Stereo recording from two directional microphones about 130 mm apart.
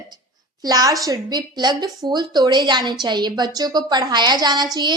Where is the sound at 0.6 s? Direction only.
30° right (ahead or behind).